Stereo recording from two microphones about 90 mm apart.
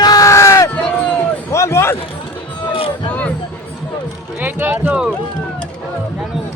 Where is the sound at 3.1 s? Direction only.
15° left (ahead or behind).